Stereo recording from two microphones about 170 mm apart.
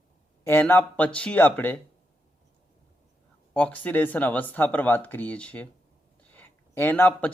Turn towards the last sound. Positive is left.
turn(degrees=10)  # may be behind; listen again after turning